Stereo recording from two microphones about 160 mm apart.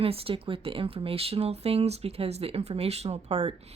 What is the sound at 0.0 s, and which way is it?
A woman's voice, 35° right (ahead or behind).